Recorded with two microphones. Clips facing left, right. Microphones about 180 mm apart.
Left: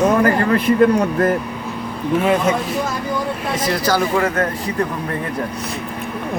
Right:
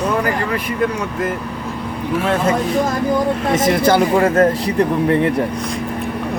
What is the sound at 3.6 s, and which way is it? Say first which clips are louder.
Speech: right 4 dB; 25° right (ahead or behind).